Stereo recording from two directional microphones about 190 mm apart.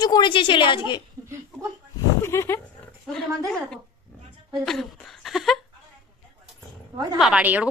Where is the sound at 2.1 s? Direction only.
15° left (ahead or behind).